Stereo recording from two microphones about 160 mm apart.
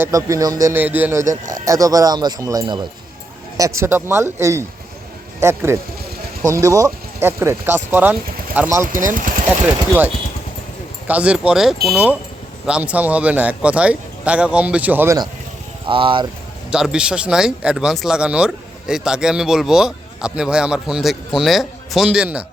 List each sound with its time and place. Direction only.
0.0 s speech: 20° right (ahead or behind)
1.6 s a man's voice: 20° right (ahead or behind)
9.0 s speech: 55° right (ahead or behind)
9.5 s a man's voice: 10° right (ahead or behind)
11.1 s a man's voice: 5° right (ahead or behind)
15.9 s speech: 35° right (ahead or behind)
16.7 s speech: 5° right (ahead or behind)